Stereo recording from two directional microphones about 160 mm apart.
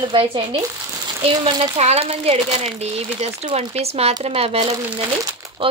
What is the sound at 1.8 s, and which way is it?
Speech, 40° right (ahead or behind).